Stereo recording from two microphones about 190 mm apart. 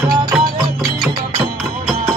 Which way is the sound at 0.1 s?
20° right (ahead or behind).